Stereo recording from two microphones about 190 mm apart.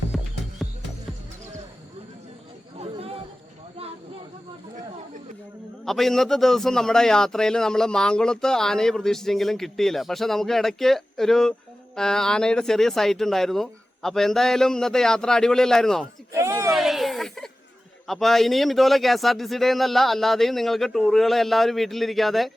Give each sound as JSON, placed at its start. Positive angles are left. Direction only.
{"t": 0.1, "sound": "music", "side_deg": 0}
{"t": 2.7, "sound": "chatter", "side_deg": -30}
{"t": 5.8, "sound": "a man's voice", "side_deg": 0}
{"t": 16.3, "sound": "speech", "side_deg": -15}
{"t": 16.7, "sound": "a sound", "side_deg": 0}
{"t": 18.0, "sound": "a man's voice", "side_deg": 0}